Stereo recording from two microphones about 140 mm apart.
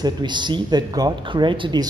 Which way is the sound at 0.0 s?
30° right (ahead or behind).